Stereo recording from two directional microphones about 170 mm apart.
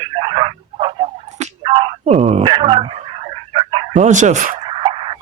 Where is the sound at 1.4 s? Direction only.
30° right (ahead or behind).